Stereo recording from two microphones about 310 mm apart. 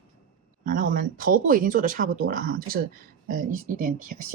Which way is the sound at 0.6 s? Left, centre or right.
Right.